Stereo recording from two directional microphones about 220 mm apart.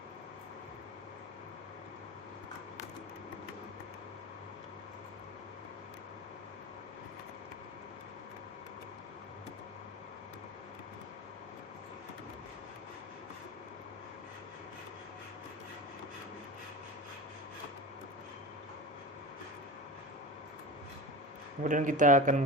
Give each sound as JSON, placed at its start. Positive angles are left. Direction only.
{"t": 21.6, "sound": "speech", "side_deg": -35}